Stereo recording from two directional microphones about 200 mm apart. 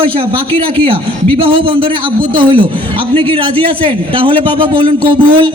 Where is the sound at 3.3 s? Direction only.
25° right (ahead or behind).